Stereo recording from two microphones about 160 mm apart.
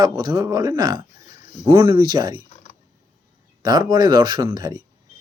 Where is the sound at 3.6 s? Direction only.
25° right (ahead or behind).